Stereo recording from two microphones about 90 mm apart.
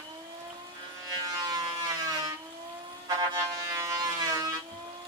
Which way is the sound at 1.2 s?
45° right (ahead or behind).